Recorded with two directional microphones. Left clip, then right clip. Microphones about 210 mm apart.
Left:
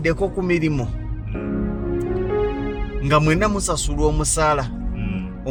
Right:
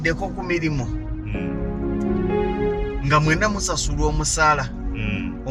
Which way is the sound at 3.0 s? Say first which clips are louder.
Left 2 dB; 50° left (ahead or behind).